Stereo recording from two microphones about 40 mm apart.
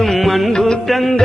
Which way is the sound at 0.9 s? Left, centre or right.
Centre.